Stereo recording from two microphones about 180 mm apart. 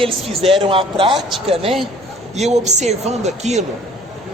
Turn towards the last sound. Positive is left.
turn(degrees=-40)  # may be behind; listen again after turning